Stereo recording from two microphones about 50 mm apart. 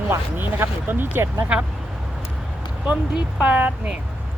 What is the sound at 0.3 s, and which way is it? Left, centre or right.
Speech, right.